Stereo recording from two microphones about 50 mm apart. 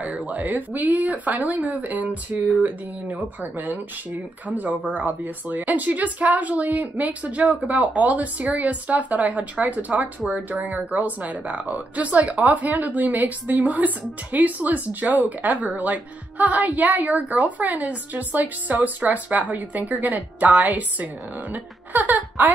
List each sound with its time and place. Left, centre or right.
0.5 s a woman's voice: right
3.5 s a woman's voice: right
4.9 s a woman's voice: right